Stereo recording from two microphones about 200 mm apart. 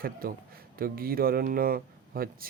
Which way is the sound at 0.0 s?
45° right (ahead or behind).